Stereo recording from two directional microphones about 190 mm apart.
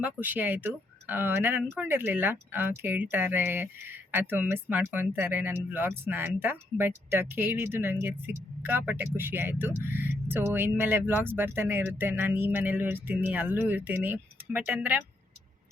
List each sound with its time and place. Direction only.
0.0 s speech: 10° right (ahead or behind)